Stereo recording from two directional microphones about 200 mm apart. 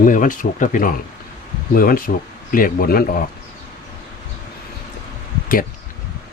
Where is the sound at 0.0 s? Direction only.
40° left (ahead or behind).